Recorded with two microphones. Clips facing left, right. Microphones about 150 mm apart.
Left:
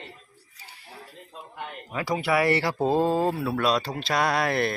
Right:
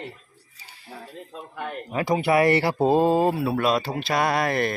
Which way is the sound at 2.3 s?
50° right (ahead or behind).